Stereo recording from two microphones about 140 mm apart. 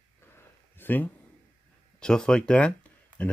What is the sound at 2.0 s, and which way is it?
Speech, 5° left (ahead or behind).